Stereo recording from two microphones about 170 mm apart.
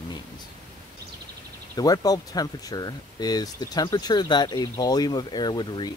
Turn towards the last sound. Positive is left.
turn(degrees=25)  # may be behind; listen again after turning